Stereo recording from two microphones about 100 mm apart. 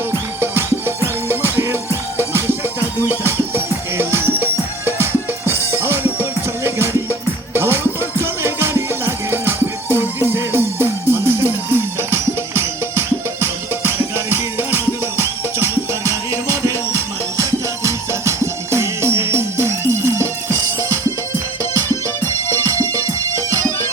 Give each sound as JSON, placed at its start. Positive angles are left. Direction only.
{"t": 0.1, "sound": "music", "side_deg": -25}
{"t": 5.5, "sound": "music", "side_deg": -25}
{"t": 22.6, "sound": "music", "side_deg": -30}